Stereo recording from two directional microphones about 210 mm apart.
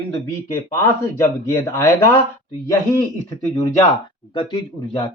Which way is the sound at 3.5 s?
15° left (ahead or behind).